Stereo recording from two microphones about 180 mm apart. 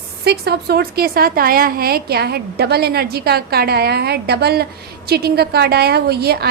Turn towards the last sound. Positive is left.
turn(degrees=-60)  # may be behind; listen again after turning